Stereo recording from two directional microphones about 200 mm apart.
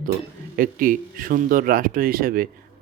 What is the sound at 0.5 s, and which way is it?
Speech, 45° right (ahead or behind).